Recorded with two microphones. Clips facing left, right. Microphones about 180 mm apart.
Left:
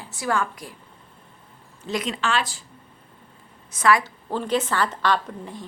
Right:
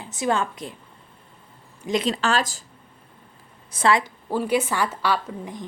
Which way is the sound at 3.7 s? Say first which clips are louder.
Even; 30° right (ahead or behind).